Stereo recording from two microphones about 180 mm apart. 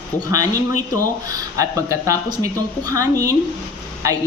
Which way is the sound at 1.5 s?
15° right (ahead or behind).